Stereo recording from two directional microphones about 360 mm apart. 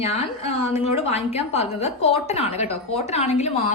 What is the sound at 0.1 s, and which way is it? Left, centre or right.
A woman's voice, centre.